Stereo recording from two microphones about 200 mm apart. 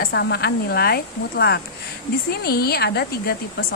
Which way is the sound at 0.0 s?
55° left (ahead or behind).